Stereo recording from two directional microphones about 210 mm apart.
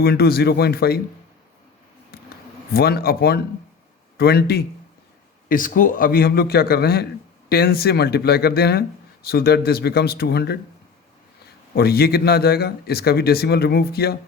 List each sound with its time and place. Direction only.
0.0 s a man's voice: 50° left (ahead or behind)
2.1 s scissors: 45° left (ahead or behind)
2.7 s a man's voice: 45° left (ahead or behind)
11.7 s a man's voice: 50° left (ahead or behind)